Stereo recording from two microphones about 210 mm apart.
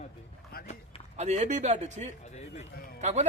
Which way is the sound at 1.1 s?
35° right (ahead or behind).